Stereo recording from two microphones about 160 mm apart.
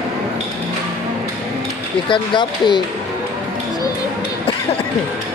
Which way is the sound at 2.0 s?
30° left (ahead or behind).